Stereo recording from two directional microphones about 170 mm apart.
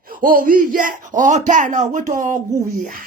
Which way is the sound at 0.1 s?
55° right (ahead or behind).